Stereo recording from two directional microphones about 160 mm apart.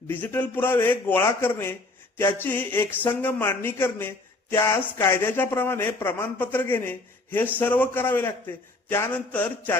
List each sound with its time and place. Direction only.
0.1 s a man's voice: 10° left (ahead or behind)